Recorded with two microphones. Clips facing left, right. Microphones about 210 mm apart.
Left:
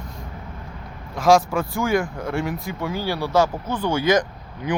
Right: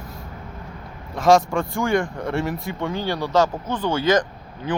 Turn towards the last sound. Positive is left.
turn(degrees=15)  # may be behind; listen again after turning